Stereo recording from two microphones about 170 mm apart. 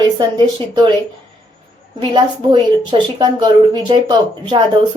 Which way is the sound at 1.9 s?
25° right (ahead or behind).